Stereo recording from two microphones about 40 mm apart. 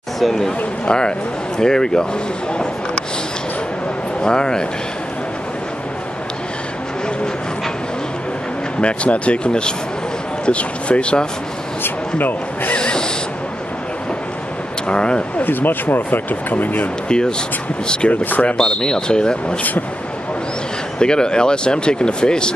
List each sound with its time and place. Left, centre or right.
0.2 s speech: centre
0.8 s speech: left
4.2 s speech: left
8.8 s speech: left
11.8 s speech: left
12.7 s a sound: left
14.9 s speech: left
15.3 s speech: left
18.1 s speech: left
18.6 s speech: centre
21.0 s speech: left